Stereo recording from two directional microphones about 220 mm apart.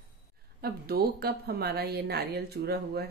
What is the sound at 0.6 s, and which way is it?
A woman's voice, 45° right (ahead or behind).